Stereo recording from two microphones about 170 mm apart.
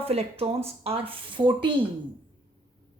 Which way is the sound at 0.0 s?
35° right (ahead or behind).